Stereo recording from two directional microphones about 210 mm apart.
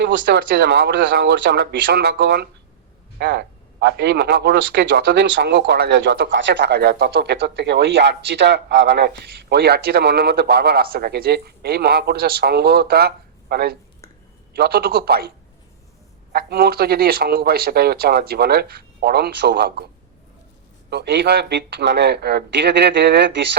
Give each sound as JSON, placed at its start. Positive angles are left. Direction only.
{"t": 0.0, "sound": "a man's voice", "side_deg": -55}
{"t": 16.3, "sound": "a man's voice", "side_deg": -45}
{"t": 20.9, "sound": "a man's voice", "side_deg": -55}